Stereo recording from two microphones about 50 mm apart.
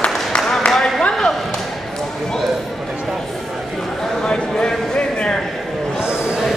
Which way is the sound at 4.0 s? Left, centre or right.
Centre.